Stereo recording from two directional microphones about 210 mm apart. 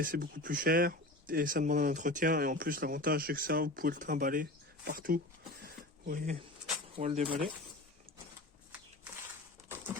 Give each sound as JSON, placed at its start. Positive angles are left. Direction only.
{"t": 0.0, "sound": "speech", "side_deg": -40}
{"t": 5.6, "sound": "a sound", "side_deg": -40}
{"t": 6.9, "sound": "speech", "side_deg": -30}